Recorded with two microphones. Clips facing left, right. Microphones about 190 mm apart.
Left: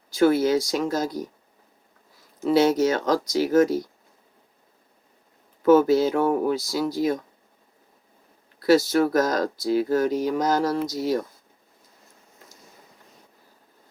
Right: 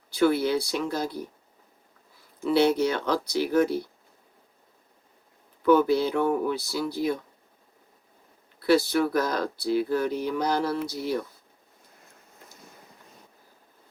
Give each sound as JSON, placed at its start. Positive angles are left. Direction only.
{"t": 0.2, "sound": "speech", "side_deg": 45}
{"t": 2.4, "sound": "speech", "side_deg": 45}
{"t": 5.6, "sound": "speech", "side_deg": 45}
{"t": 8.6, "sound": "speech", "side_deg": 45}